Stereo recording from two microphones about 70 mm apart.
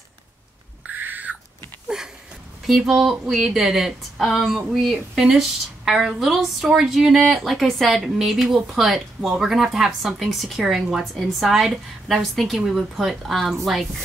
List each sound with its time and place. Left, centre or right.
0.8 s bird: right
1.9 s a sound: centre
2.6 s speech: centre